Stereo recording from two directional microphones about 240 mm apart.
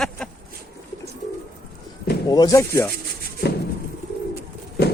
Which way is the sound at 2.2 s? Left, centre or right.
Centre.